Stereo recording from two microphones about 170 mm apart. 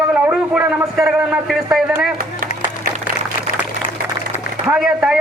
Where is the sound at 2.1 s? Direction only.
60° right (ahead or behind).